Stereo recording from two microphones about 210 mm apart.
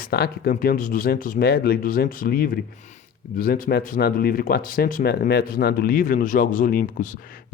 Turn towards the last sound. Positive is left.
turn(degrees=40)  # may be behind; listen again after turning